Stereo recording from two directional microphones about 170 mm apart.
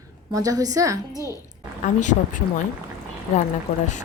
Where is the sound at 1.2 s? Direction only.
20° left (ahead or behind).